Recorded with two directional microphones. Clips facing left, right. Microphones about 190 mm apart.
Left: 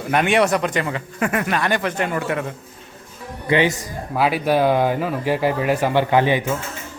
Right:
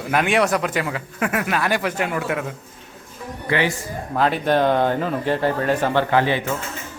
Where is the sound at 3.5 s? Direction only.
20° left (ahead or behind).